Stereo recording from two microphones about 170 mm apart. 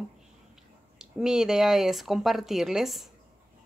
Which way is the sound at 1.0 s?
5° right (ahead or behind).